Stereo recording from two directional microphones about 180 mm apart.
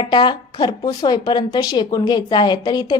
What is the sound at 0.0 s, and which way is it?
Speech, 25° left (ahead or behind).